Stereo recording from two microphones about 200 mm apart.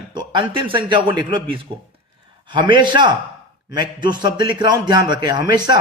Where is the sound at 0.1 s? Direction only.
25° right (ahead or behind).